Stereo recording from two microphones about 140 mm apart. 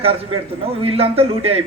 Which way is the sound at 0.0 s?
40° right (ahead or behind).